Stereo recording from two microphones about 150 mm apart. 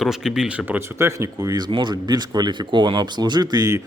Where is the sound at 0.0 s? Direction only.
Centre (ahead or behind).